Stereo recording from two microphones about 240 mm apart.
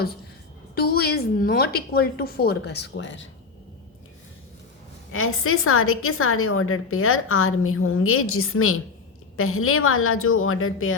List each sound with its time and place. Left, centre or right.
0.8 s a woman's voice: left
5.1 s a woman's voice: left